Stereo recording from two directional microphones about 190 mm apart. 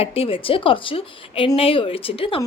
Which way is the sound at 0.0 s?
30° left (ahead or behind).